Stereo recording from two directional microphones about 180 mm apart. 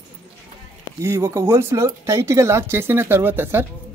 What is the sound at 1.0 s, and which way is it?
Speech, 15° right (ahead or behind).